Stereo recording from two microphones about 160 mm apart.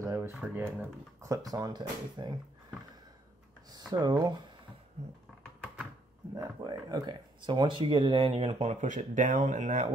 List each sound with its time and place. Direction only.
0.0 s speech: 20° right (ahead or behind)
3.7 s speech: 25° right (ahead or behind)
6.3 s speech: 25° right (ahead or behind); by 9.8 s 50° right (ahead or behind)